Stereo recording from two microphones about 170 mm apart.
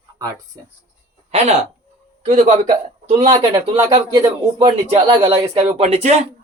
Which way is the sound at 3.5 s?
20° right (ahead or behind).